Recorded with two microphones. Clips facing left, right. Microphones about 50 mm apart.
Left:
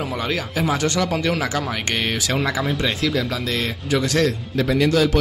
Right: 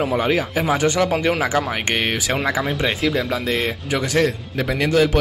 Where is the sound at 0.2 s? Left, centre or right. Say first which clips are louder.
Right 3 dB; centre.